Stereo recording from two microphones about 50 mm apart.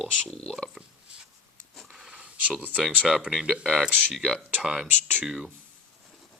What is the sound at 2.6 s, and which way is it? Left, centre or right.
Speech, right.